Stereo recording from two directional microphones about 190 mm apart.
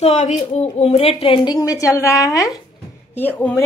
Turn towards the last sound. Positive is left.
turn(degrees=10)  # may be behind; listen again after turning